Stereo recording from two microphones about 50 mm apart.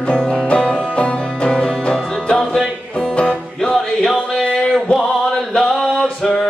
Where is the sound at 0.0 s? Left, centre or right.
Centre.